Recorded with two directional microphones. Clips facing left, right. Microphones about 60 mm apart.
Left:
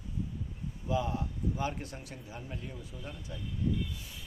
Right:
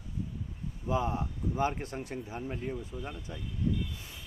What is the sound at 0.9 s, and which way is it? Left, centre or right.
Speech, right.